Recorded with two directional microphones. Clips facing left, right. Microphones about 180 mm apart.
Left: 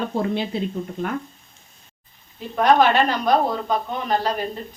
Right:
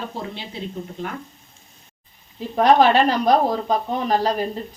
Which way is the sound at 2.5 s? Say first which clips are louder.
Right 2 dB; 30° right (ahead or behind).